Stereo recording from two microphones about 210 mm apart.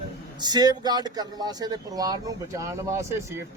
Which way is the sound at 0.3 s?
20° right (ahead or behind).